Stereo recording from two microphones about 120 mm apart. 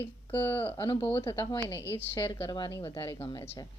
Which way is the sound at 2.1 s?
40° left (ahead or behind).